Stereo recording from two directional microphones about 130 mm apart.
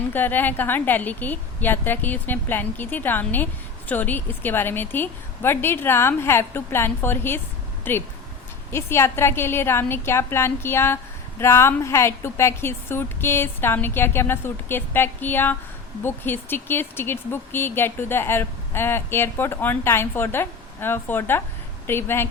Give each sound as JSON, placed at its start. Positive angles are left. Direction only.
{"t": 0.1, "sound": "a woman's voice", "side_deg": 15}